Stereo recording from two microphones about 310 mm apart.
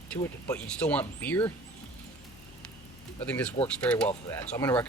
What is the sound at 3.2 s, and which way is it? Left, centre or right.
Speech, centre.